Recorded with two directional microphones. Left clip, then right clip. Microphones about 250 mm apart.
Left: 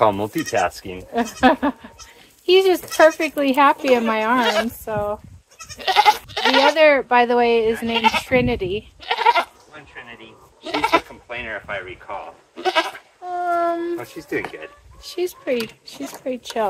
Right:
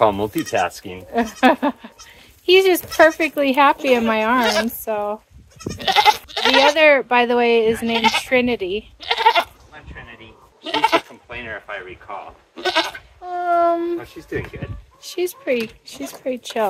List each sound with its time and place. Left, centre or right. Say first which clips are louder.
0.0 s speech: right 1 dB; centre
5.8 s goat: even; right
6.7 s speech: right 1 dB; right
9.0 s goat: right 1 dB; right
10.7 s goat: right 1 dB; centre
11.2 s speech: left 2 dB; centre
12.6 s speech: even; centre
13.9 s speech: left 1 dB; left
15.0 s speech: right 2 dB; right